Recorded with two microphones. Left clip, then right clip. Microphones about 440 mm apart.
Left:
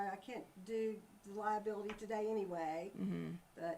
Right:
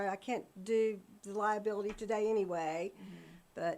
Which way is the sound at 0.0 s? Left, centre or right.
Right.